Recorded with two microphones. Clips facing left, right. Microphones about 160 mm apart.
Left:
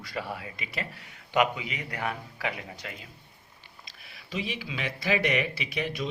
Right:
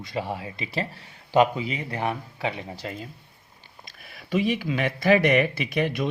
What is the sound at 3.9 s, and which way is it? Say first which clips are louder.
Speech: right 12 dB; 50° right (ahead or behind).